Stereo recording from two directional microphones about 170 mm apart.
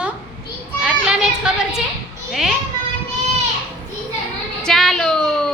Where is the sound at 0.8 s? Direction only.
5° right (ahead or behind).